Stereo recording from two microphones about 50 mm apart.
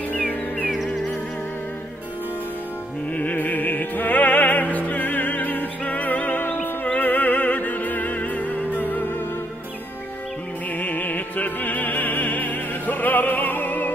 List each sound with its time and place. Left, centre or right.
0.1 s music: left
3.2 s music: left
10.8 s music: left